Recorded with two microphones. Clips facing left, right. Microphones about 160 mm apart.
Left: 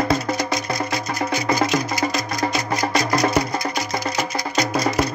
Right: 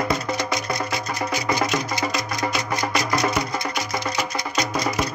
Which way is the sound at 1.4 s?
35° left (ahead or behind).